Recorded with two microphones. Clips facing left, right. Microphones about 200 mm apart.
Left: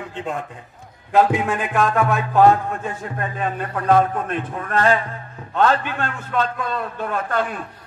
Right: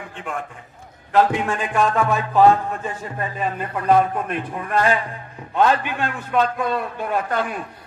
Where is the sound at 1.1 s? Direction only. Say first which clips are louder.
Left 1 dB; 10° left (ahead or behind); by 5.0 s 10° right (ahead or behind).